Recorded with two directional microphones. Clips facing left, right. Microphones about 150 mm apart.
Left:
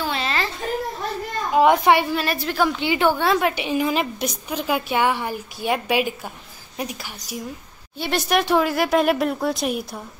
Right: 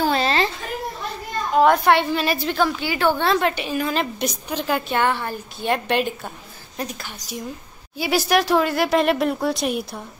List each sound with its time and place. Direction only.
0.0 s a sound: 40° right (ahead or behind)
1.5 s a woman's voice: 10° left (ahead or behind)
2.1 s speech: centre (ahead or behind)
2.8 s a woman's voice: 20° left (ahead or behind)
3.1 s a woman's voice: 10° left (ahead or behind)
8.0 s speech: 5° right (ahead or behind)